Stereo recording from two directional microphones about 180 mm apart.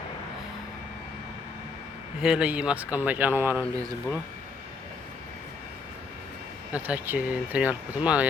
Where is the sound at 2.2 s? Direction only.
5° right (ahead or behind).